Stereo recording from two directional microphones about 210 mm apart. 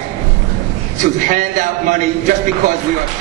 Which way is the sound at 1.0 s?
35° right (ahead or behind).